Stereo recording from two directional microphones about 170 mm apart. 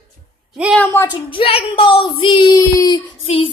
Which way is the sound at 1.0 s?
25° left (ahead or behind).